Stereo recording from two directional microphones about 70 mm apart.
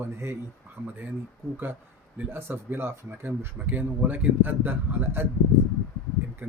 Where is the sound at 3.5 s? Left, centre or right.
Right.